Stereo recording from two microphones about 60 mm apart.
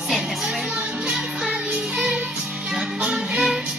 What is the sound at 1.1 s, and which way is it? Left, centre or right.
Music, centre.